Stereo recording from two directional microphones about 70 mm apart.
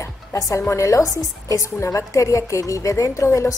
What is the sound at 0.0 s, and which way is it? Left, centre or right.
A woman's voice, left.